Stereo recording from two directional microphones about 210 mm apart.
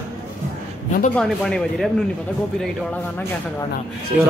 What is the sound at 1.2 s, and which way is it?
Speech, 5° left (ahead or behind).